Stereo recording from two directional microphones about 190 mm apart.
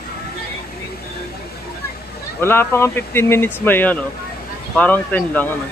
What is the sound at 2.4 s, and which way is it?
Speech, 10° left (ahead or behind).